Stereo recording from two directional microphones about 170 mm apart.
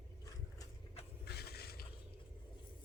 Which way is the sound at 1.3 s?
70° left (ahead or behind).